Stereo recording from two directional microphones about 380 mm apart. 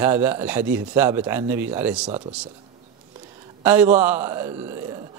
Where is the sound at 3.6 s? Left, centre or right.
Centre.